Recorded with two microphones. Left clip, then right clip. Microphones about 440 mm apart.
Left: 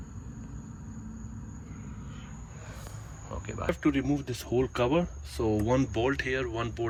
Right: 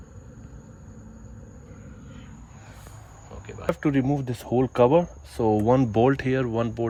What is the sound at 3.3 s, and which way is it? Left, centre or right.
Cricket, centre.